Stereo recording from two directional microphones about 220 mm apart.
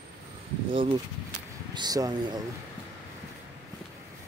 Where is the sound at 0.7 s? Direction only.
20° right (ahead or behind).